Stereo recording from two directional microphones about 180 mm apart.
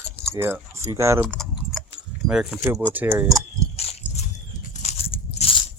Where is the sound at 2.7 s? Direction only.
15° right (ahead or behind).